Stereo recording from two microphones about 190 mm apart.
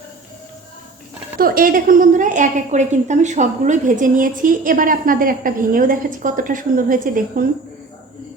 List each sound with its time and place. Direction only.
1.4 s a woman's voice: 50° right (ahead or behind)